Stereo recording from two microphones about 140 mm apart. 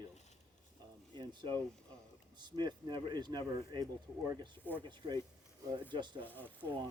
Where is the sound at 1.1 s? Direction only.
30° right (ahead or behind).